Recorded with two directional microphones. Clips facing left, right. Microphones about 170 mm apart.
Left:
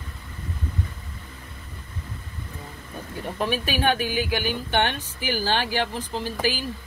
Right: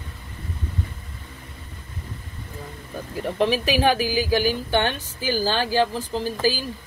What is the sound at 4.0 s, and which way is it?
Speech, 35° right (ahead or behind).